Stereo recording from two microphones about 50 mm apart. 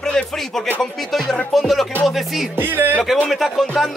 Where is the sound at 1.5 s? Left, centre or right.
Centre.